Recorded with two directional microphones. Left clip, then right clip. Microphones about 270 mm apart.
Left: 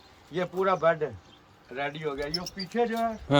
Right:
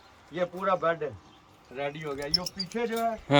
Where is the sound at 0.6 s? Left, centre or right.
Left.